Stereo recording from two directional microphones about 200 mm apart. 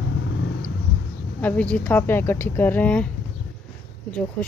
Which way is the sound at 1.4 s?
5° left (ahead or behind).